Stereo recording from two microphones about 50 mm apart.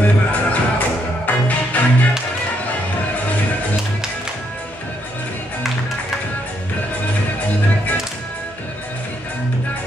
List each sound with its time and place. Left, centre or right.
0.0 s music: left